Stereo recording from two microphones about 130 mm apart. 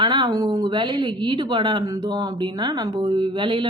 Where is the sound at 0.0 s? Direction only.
35° right (ahead or behind).